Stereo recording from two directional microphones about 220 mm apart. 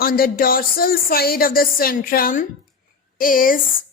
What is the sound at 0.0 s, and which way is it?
Speech, 40° left (ahead or behind).